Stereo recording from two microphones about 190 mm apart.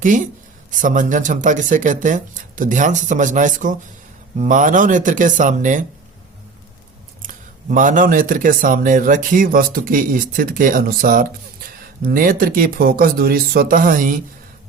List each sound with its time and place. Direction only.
0.7 s speech: 45° right (ahead or behind)
7.2 s speech: 45° right (ahead or behind)